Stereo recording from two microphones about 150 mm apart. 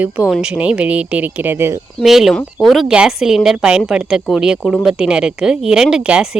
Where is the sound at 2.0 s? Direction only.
Centre (ahead or behind).